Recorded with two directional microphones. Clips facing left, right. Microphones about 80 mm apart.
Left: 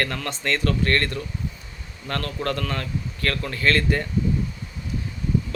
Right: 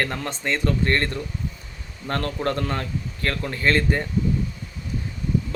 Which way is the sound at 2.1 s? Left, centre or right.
Right.